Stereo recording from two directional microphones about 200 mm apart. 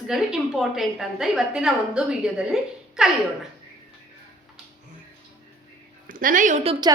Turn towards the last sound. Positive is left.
turn(degrees=-25)  # may be behind; listen again after turning